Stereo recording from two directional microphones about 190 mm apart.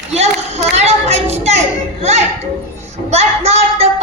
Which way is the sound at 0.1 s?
35° right (ahead or behind).